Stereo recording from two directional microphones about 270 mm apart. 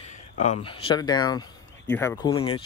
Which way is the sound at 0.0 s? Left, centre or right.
Left.